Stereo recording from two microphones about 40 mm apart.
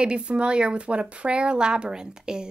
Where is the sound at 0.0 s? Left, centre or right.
Right.